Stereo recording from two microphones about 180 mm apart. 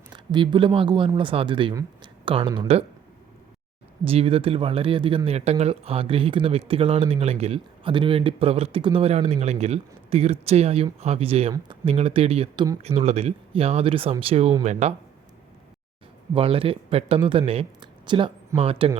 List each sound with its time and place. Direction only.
0.1 s speech: 25° right (ahead or behind)
4.0 s speech: 30° right (ahead or behind)
16.3 s speech: 30° right (ahead or behind)